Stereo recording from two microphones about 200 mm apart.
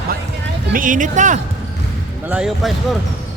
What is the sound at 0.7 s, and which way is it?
Speech, 40° right (ahead or behind).